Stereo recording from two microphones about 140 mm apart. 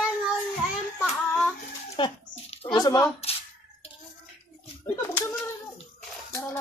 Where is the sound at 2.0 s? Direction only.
35° left (ahead or behind).